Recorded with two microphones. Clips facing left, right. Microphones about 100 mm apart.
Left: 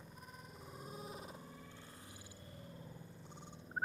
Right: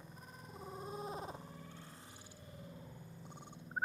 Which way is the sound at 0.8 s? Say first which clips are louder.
Right 5 dB; 35° right (ahead or behind).